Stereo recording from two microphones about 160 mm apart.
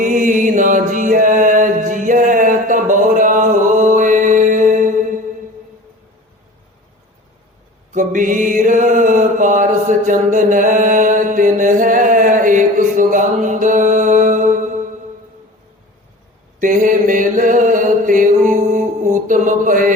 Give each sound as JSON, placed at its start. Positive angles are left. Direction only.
{"t": 0.0, "sound": "mantra", "side_deg": -55}
{"t": 7.9, "sound": "mantra", "side_deg": -55}
{"t": 16.6, "sound": "mantra", "side_deg": -55}